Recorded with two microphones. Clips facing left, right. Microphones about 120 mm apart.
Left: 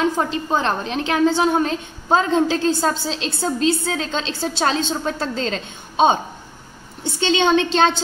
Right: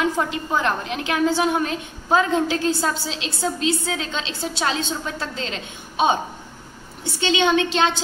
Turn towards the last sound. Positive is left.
turn(degrees=35)  # may be behind; listen again after turning